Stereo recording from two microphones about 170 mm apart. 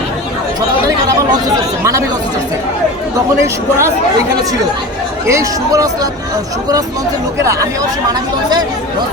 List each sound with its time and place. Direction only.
1.8 s speech: 15° right (ahead or behind)
3.4 s speech: 15° right (ahead or behind)
5.3 s speech: 20° right (ahead or behind)